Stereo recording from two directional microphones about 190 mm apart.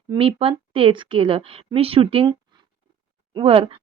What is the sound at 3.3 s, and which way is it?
Speech, 30° right (ahead or behind).